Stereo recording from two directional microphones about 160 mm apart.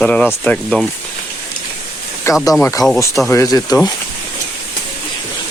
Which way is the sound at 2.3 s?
15° left (ahead or behind).